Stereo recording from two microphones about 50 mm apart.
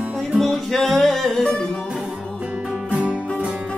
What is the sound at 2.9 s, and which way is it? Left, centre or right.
Music, right.